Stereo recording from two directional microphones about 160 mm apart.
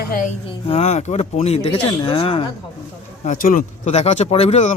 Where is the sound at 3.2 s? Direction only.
55° left (ahead or behind).